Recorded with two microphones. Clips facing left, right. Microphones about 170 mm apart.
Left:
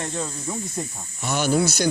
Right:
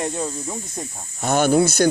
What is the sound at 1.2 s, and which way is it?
Speech, 50° right (ahead or behind).